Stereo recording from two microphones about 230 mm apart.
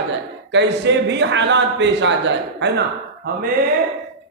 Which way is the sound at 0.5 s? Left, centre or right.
Right.